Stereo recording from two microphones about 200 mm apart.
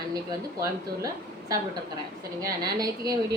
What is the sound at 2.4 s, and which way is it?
Speech, 20° right (ahead or behind).